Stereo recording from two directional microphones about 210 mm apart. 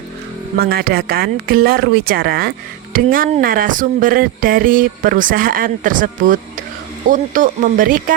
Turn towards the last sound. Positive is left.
turn(degrees=-40)  # may be behind; listen again after turning